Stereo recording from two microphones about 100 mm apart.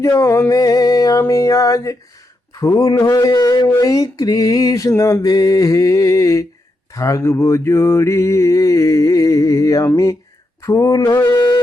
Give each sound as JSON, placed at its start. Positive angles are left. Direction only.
{"t": 0.0, "sound": "mantra", "side_deg": 30}
{"t": 11.3, "sound": "carnatic music", "side_deg": 45}